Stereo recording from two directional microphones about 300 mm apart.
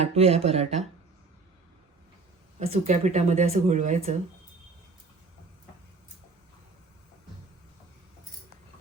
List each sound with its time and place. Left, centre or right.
0.0 s speech: centre
2.6 s speech: right